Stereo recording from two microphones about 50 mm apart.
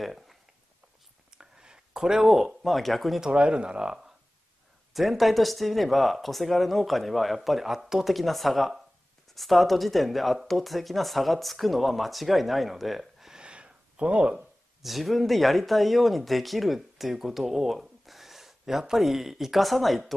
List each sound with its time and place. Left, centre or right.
0.0 s a sound: centre
1.4 s speech: centre
3.2 s speech: right
4.9 s speech: centre
13.3 s a sound: centre
14.3 s speech: centre